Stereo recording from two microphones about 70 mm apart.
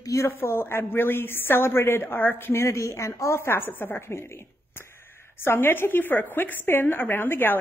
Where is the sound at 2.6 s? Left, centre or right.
Left.